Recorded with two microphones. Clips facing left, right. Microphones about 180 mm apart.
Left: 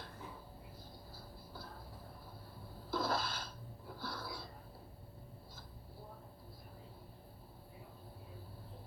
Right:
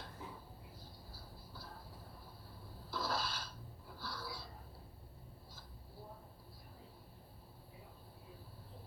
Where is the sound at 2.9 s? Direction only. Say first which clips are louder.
Left 3 dB; 50° left (ahead or behind).